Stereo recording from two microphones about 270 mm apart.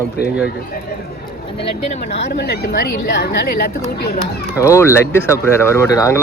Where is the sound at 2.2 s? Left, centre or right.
Left.